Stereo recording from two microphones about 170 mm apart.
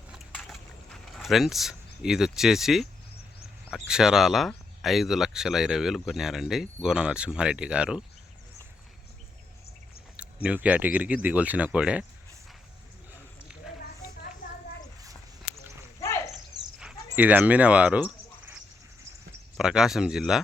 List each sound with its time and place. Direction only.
0.1 s boat: centre (ahead or behind)
1.1 s speech: centre (ahead or behind)
10.2 s speech: 5° right (ahead or behind)
16.0 s a sound: 15° left (ahead or behind)
16.8 s a sound: 10° right (ahead or behind)
19.5 s speech: 5° right (ahead or behind)